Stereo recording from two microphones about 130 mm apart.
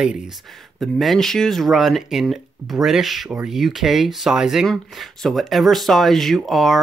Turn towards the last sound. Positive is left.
turn(degrees=0)  # may be behind; listen again after turning